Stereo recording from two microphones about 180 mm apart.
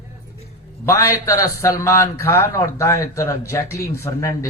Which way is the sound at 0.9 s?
15° left (ahead or behind).